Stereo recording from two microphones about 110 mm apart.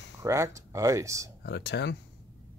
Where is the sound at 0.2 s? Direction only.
25° right (ahead or behind).